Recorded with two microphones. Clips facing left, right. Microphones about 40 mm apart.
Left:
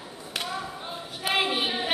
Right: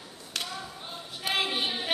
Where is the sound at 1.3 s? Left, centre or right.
Centre.